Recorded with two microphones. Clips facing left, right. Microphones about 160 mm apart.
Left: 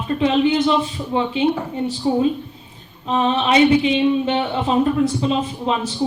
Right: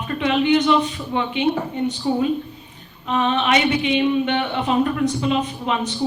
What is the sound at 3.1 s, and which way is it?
A man's voice, 30° left (ahead or behind).